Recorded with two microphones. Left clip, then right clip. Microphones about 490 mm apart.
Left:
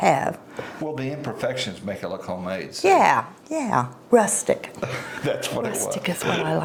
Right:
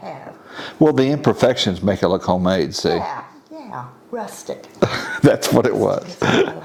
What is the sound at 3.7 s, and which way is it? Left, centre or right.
Speech, left.